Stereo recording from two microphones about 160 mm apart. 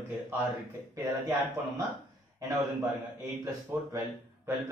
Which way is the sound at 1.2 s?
15° right (ahead or behind).